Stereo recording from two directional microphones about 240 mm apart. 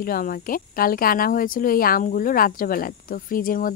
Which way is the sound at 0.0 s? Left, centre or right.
Left.